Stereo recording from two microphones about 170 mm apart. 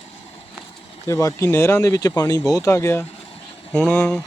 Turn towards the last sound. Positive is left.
turn(degrees=5)  # may be behind; listen again after turning